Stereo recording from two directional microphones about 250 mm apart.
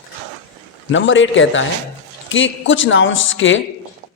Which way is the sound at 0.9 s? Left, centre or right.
Left.